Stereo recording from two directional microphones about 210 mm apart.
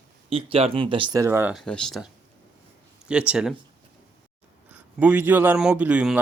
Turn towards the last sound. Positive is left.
turn(degrees=-5)  # may be behind; listen again after turning